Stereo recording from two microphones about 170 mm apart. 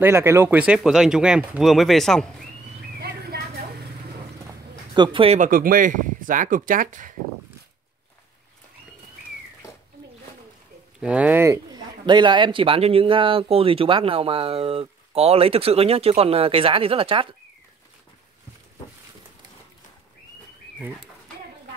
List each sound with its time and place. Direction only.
0.0 s speech: 15° right (ahead or behind); by 2.2 s centre (ahead or behind)
3.0 s a sound: 65° right (ahead or behind)
4.9 s speech: 30° right (ahead or behind)
5.4 s speech: 55° right (ahead or behind)
11.0 s speech: 5° right (ahead or behind); by 17.4 s 30° right (ahead or behind)